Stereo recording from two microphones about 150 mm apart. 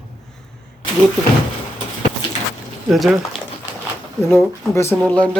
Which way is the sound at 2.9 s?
Centre (ahead or behind).